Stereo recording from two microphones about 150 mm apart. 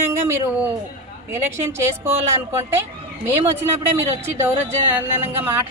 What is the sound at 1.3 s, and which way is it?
Speech, 15° right (ahead or behind).